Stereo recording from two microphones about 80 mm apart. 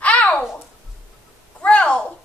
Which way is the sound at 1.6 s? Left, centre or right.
Centre.